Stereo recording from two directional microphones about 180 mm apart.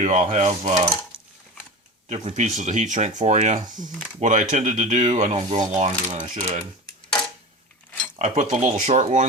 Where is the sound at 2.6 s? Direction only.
40° right (ahead or behind).